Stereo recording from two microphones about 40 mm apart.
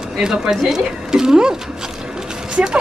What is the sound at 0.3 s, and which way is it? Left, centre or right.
Speech, centre.